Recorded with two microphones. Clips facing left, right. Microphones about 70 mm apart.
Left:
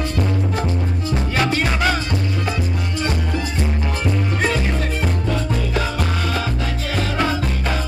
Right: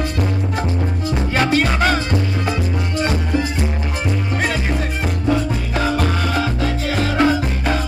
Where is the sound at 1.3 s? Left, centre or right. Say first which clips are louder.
Right 4 dB; right.